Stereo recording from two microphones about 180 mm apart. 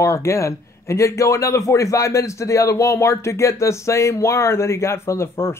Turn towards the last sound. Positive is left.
turn(degrees=15)  # may be behind; listen again after turning